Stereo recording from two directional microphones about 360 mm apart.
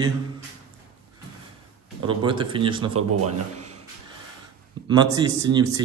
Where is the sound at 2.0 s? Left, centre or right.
Centre.